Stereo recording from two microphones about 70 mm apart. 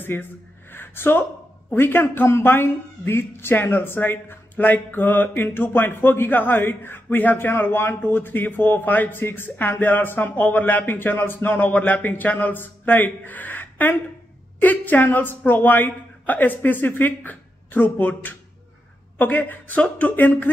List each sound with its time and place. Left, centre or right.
0.0 s speech: left